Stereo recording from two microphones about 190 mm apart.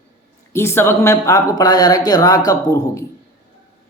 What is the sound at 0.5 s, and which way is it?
A man's voice, 15° left (ahead or behind).